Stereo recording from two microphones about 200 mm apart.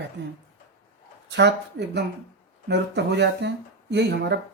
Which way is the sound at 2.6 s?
55° right (ahead or behind).